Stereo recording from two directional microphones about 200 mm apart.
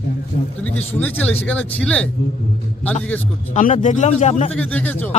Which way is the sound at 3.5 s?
40° left (ahead or behind).